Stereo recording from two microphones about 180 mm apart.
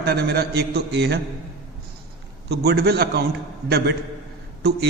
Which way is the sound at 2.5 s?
65° right (ahead or behind).